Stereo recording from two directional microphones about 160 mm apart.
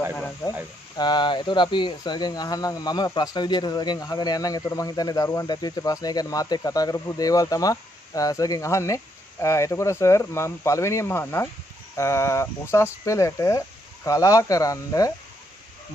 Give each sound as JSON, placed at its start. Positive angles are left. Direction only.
{"t": 0.4, "sound": "speech", "side_deg": 20}